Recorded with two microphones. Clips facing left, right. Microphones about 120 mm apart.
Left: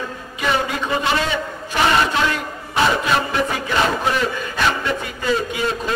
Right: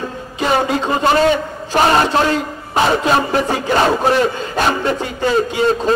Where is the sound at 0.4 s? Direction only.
30° right (ahead or behind).